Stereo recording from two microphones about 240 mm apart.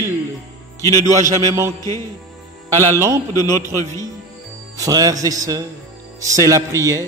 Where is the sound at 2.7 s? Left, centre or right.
Centre.